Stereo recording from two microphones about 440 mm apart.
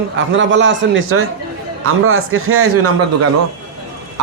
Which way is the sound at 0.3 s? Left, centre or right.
Right.